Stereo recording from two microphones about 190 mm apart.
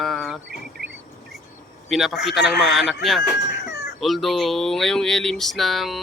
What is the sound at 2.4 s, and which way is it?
Speech, 60° left (ahead or behind).